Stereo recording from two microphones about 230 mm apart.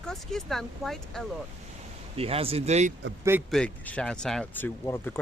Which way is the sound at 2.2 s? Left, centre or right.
Right.